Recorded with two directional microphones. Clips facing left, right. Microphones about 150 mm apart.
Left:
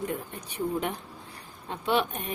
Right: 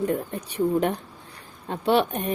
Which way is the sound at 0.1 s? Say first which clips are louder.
Right 8 dB; 35° right (ahead or behind).